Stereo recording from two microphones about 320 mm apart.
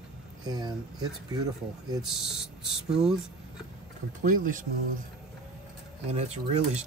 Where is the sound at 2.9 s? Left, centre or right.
Centre.